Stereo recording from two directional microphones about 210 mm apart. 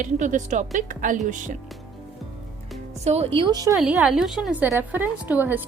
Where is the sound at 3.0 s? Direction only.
30° right (ahead or behind).